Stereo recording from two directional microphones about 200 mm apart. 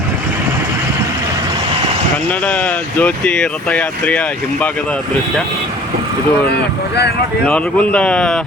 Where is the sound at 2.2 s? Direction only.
5° left (ahead or behind).